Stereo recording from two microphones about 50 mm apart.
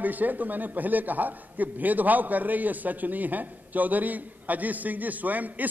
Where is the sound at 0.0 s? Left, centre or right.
Right.